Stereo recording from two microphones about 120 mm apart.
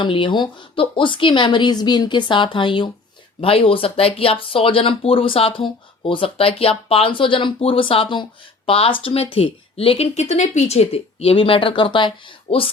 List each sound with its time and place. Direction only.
0.0 s speech: 40° left (ahead or behind)
10.2 s speech: 70° left (ahead or behind); by 12.7 s 50° left (ahead or behind)